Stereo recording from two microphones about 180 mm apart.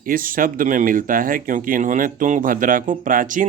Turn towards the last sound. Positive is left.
turn(degrees=-45)  # may be behind; listen again after turning